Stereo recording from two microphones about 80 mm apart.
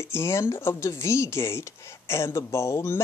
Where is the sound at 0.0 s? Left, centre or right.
Left.